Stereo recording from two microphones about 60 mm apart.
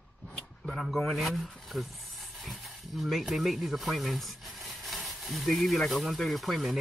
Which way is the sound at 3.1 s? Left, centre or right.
Centre.